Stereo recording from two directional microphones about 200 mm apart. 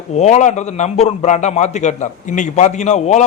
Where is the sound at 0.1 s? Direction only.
35° left (ahead or behind).